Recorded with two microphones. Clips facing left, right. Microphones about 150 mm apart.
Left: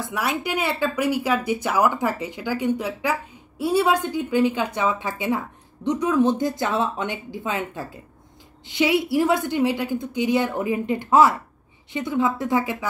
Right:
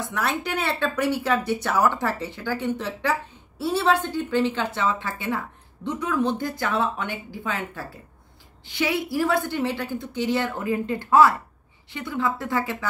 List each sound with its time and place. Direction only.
0.1 s speech: 10° left (ahead or behind)